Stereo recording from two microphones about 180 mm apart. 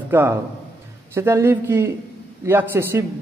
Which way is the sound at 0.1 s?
10° right (ahead or behind).